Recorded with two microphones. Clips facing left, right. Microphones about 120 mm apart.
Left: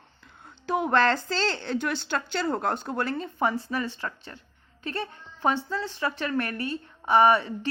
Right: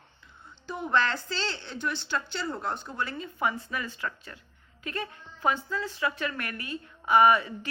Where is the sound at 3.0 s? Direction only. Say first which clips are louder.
Left 2 dB; 40° left (ahead or behind).